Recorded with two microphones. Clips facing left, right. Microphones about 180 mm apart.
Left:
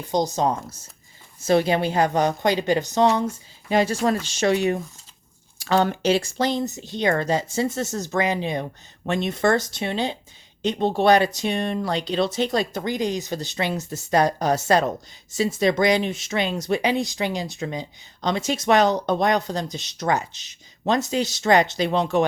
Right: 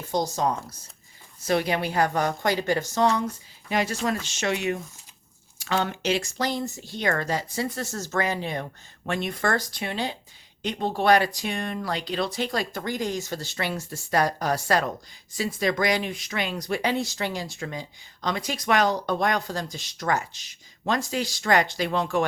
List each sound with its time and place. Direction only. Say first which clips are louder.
0.0 s speech: left 3 dB; 20° left (ahead or behind)